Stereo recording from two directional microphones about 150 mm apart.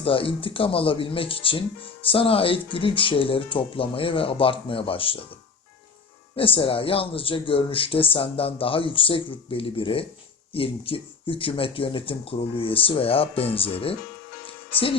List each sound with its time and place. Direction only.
0.0 s speech: 35° left (ahead or behind)
6.3 s speech: 35° left (ahead or behind)
14.4 s music: 35° left (ahead or behind)